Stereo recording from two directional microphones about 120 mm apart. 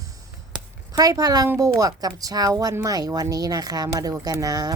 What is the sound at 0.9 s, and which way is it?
Speech, 30° right (ahead or behind).